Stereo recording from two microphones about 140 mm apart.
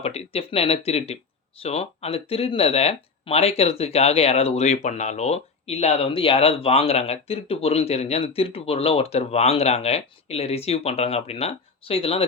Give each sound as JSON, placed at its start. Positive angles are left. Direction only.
{"t": 0.0, "sound": "speech", "side_deg": 45}